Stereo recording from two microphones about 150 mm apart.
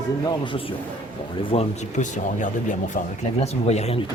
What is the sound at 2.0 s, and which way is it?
Speech, 55° left (ahead or behind).